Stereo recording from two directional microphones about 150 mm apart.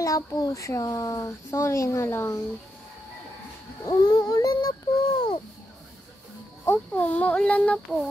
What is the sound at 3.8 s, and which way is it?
Child singing, 25° left (ahead or behind).